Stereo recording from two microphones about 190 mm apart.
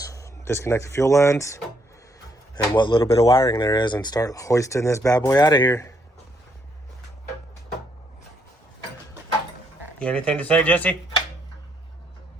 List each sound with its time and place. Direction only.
0.0 s speech: 15° left (ahead or behind)
2.7 s speech: 25° left (ahead or behind)
10.0 s speech: 5° left (ahead or behind)